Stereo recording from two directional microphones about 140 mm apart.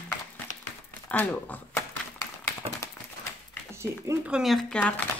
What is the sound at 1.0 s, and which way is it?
Speech, 10° left (ahead or behind).